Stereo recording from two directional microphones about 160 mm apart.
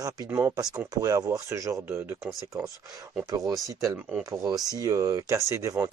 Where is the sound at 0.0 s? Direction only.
20° right (ahead or behind).